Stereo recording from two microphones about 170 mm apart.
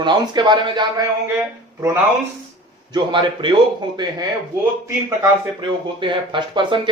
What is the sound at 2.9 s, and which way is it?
Speech, 30° right (ahead or behind).